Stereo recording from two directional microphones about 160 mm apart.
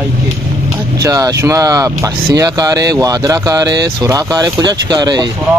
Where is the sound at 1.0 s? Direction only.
20° right (ahead or behind).